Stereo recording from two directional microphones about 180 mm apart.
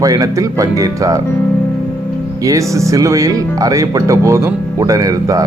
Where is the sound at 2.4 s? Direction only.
20° right (ahead or behind).